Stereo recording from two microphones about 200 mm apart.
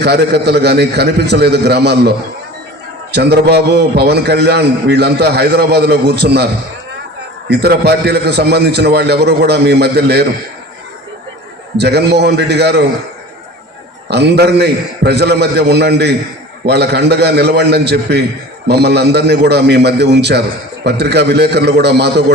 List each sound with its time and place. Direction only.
0.0 s a man's voice: 55° right (ahead or behind)
7.5 s a man's voice: 55° right (ahead or behind)
11.8 s a man's voice: 55° right (ahead or behind)
14.1 s a man's voice: 55° right (ahead or behind)